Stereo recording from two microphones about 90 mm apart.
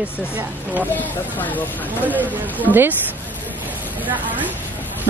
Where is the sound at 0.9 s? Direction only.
20° left (ahead or behind).